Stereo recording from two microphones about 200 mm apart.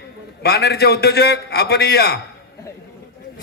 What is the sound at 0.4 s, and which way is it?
A man's voice, 55° left (ahead or behind).